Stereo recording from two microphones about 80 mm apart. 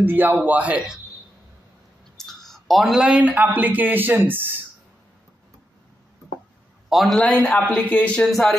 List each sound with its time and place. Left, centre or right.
0.0 s a woman's voice: right
2.1 s a sound: centre
3.1 s a woman's voice: centre
6.9 s a man's voice: centre
7.2 s a man's voice: centre
8.3 s speech: centre